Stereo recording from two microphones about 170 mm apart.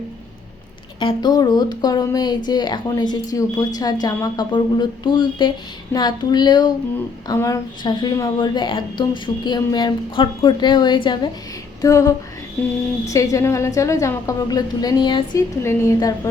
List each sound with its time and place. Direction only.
0.9 s a woman's voice: 25° left (ahead or behind)